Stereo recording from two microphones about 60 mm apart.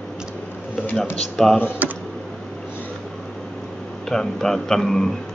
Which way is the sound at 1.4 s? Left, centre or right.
Centre.